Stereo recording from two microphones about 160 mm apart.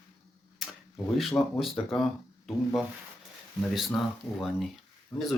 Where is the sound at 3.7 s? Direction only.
Centre (ahead or behind).